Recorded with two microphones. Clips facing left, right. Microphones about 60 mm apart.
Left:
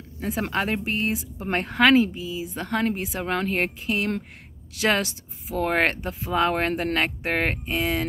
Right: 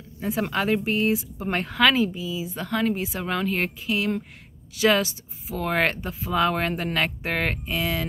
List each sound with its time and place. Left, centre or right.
0.4 s speech: left